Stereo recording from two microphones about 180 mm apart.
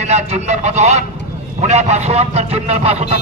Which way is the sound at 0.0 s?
35° right (ahead or behind).